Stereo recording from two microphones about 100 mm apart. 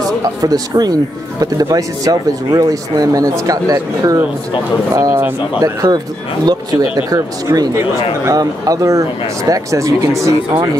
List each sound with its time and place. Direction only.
0.2 s speech: 40° right (ahead or behind)
7.1 s speech: 40° right (ahead or behind)